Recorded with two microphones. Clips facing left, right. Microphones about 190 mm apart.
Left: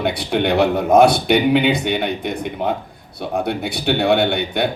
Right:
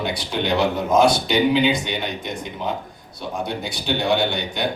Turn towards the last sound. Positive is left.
turn(degrees=60)  # may be behind; listen again after turning